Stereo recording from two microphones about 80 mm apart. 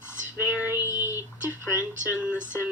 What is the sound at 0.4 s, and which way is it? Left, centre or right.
Female singing, left.